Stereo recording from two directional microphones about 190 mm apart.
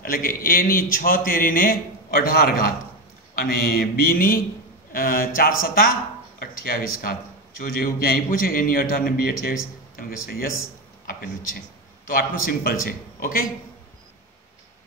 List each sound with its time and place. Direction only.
0.0 s a man's voice: 50° left (ahead or behind)